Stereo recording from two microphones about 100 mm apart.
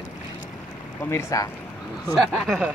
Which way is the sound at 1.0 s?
25° left (ahead or behind).